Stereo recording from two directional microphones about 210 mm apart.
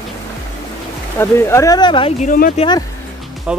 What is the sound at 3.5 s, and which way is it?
Speech, 5° right (ahead or behind).